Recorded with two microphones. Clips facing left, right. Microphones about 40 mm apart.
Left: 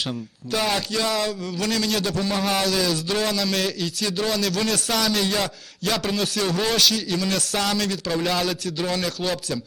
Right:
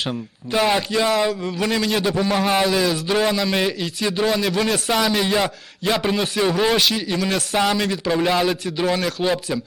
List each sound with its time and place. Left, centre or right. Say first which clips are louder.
0.1 s speech: right 3 dB; centre